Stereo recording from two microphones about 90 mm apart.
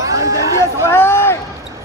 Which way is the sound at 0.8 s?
25° left (ahead or behind).